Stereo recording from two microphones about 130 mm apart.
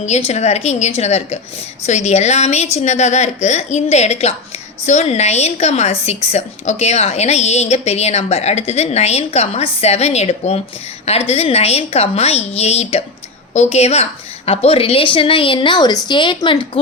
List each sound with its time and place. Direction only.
0.0 s a woman's voice: 55° left (ahead or behind); by 16.8 s 40° left (ahead or behind)